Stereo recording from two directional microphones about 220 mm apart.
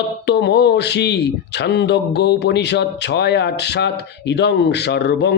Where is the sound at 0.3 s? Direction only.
50° left (ahead or behind).